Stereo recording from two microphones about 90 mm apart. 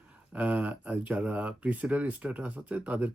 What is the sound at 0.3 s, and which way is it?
Speech, 15° right (ahead or behind).